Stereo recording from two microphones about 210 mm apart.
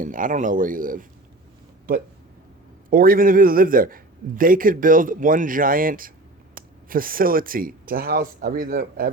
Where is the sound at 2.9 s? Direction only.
40° right (ahead or behind).